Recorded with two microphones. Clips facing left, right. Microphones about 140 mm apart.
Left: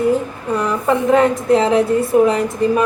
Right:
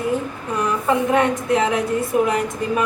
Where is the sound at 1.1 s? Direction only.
30° left (ahead or behind).